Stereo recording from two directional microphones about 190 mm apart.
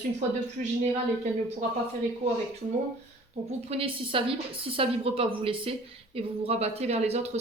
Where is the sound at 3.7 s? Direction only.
30° right (ahead or behind).